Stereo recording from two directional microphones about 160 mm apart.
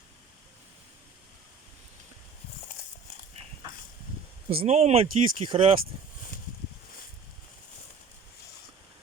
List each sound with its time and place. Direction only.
4.4 s speech: 40° right (ahead or behind)